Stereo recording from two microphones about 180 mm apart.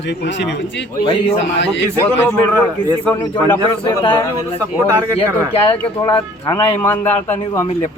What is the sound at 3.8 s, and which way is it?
Speech, 25° left (ahead or behind).